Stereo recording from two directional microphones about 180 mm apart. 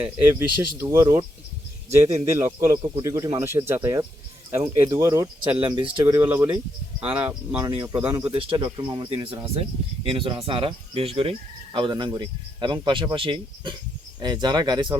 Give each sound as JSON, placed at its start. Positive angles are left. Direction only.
{"t": 0.0, "sound": "speech", "side_deg": -15}
{"t": 2.2, "sound": "speech", "side_deg": -15}
{"t": 5.5, "sound": "speech", "side_deg": -30}
{"t": 8.3, "sound": "speech", "side_deg": -30}